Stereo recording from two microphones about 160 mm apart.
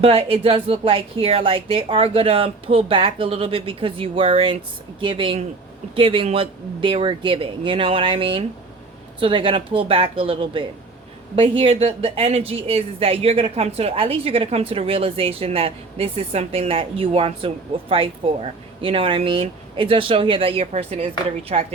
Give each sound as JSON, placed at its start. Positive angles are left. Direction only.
{"t": 0.0, "sound": "speech", "side_deg": -35}